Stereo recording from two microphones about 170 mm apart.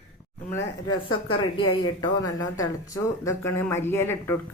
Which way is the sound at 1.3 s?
30° left (ahead or behind).